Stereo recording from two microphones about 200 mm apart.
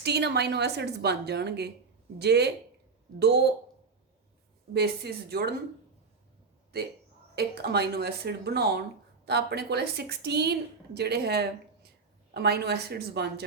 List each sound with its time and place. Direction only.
0.0 s a woman's voice: 55° right (ahead or behind)
4.7 s a woman's voice: 55° right (ahead or behind)
7.3 s a woman's voice: 55° right (ahead or behind)